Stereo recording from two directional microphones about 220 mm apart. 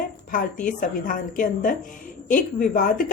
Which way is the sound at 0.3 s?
35° left (ahead or behind).